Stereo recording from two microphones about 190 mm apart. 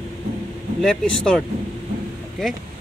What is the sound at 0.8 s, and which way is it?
Speech, 5° left (ahead or behind).